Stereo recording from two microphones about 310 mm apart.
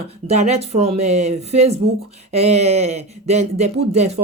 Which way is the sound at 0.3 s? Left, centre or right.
Right.